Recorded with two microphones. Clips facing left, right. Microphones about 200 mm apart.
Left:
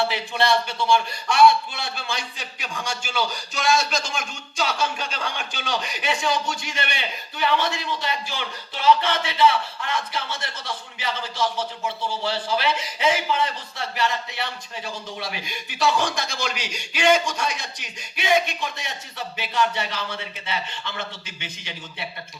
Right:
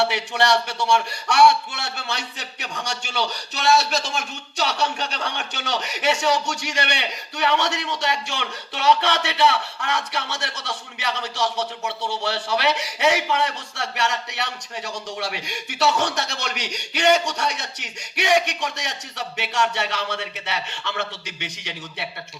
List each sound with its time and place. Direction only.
0.0 s speech: 75° right (ahead or behind)